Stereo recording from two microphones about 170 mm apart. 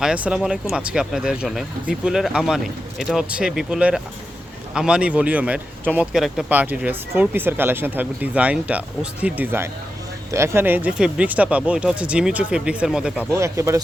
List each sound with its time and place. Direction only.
0.0 s speech: 5° right (ahead or behind)
13.3 s speech: 15° right (ahead or behind)